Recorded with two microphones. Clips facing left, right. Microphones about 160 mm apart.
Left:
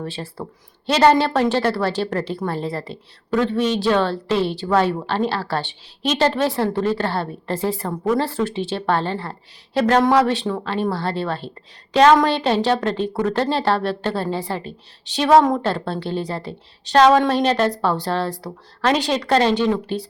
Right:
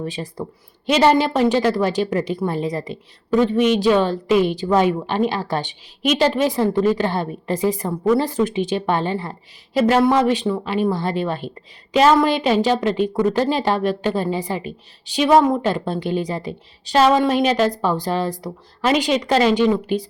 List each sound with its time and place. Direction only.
0.0 s a woman's voice: 15° right (ahead or behind)